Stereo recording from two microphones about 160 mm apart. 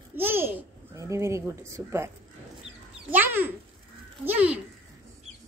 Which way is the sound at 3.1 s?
10° right (ahead or behind).